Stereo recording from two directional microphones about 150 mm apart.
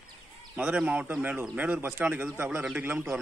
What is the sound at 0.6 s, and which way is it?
Speech, 10° right (ahead or behind).